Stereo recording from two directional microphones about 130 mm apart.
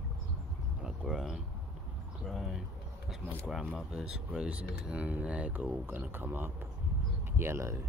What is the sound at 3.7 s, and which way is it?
Speech, 10° right (ahead or behind).